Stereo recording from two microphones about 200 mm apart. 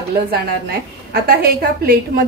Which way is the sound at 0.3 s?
50° right (ahead or behind).